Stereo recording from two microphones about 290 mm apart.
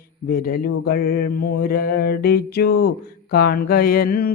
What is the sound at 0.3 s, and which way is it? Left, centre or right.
Mantra, left.